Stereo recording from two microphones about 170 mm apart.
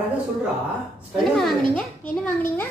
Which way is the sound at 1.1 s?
Centre (ahead or behind).